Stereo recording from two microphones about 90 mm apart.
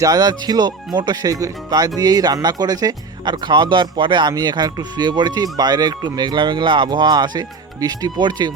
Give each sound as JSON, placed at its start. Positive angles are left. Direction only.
{"t": 0.0, "sound": "speech", "side_deg": -45}